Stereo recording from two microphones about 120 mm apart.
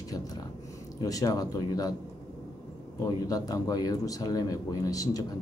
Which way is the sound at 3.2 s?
30° left (ahead or behind).